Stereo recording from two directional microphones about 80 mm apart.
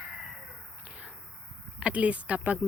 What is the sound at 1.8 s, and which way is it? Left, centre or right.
Speech, centre.